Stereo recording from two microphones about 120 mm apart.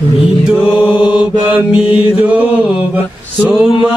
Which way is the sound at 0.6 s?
10° right (ahead or behind).